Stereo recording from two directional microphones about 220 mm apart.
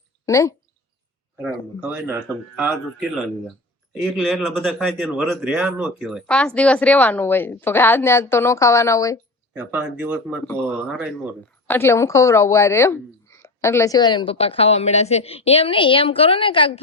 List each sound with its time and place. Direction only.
0.3 s speech: 15° left (ahead or behind)
1.9 s speech: 10° right (ahead or behind); by 9.1 s 15° left (ahead or behind)
9.5 s speech: 5° right (ahead or behind)
10.4 s speech: 5° left (ahead or behind)
11.7 s a woman's voice: 10° left (ahead or behind)